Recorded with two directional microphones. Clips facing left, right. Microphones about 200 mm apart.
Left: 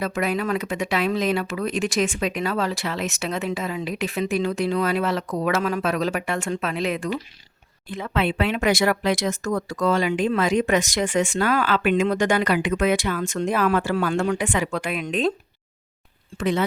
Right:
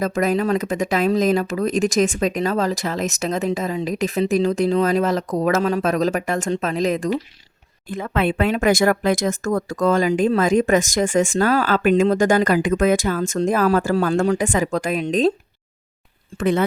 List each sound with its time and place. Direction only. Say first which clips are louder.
0.0 s speech: right 5 dB; 45° right (ahead or behind)
16.4 s speech: right 4 dB; 50° right (ahead or behind)